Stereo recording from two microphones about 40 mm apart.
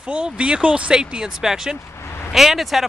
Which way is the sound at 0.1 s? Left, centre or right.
Right.